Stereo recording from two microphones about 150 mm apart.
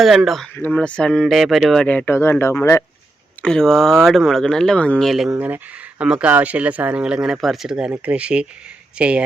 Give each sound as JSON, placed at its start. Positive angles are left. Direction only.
{"t": 0.0, "sound": "speech", "side_deg": 0}
{"t": 3.4, "sound": "speech", "side_deg": 5}
{"t": 5.3, "sound": "speech", "side_deg": -10}